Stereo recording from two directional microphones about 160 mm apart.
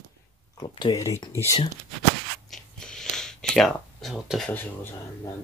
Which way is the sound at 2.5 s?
5° left (ahead or behind).